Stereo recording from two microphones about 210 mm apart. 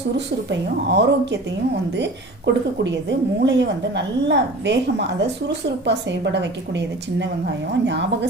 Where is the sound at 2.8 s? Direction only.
55° right (ahead or behind).